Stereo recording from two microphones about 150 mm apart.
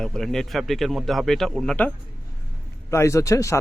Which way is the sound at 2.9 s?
20° left (ahead or behind).